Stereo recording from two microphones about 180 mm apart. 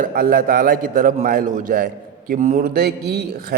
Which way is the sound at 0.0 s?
55° right (ahead or behind).